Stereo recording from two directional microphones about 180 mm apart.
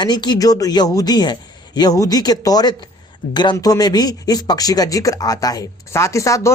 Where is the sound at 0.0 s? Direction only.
25° left (ahead or behind).